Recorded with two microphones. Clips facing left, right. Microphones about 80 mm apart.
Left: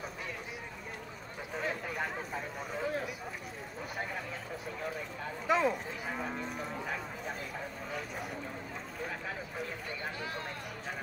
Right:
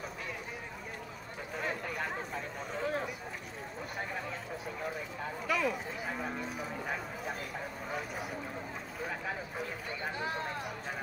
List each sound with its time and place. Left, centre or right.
1.6 s a sound: centre
5.5 s speech: left
6.1 s cattle: centre
10.1 s speech: right